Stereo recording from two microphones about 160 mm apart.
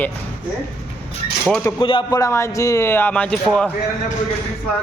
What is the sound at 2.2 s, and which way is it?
A man's voice, 20° left (ahead or behind).